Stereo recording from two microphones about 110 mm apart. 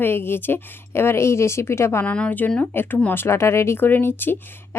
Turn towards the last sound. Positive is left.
turn(degrees=20)  # may be behind; listen again after turning